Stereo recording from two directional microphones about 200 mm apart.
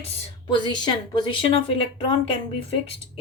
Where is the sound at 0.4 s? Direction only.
20° left (ahead or behind).